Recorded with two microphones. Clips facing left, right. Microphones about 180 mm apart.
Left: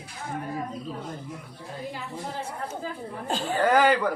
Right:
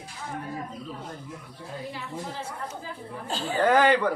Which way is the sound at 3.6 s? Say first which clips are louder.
Right 1 dB; 5° left (ahead or behind).